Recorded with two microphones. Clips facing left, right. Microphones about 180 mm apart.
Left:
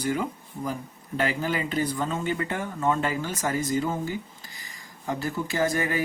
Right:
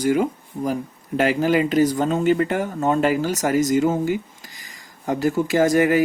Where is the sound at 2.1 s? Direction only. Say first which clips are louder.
Right 10 dB; 65° right (ahead or behind).